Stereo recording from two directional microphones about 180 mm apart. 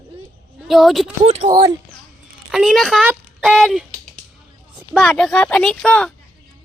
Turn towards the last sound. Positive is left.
turn(degrees=5)  # may be behind; listen again after turning